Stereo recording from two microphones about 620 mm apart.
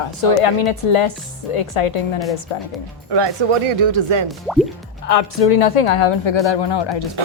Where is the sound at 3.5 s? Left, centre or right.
Right.